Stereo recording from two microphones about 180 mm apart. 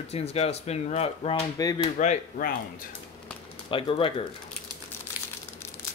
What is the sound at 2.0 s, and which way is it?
Speech, 45° left (ahead or behind).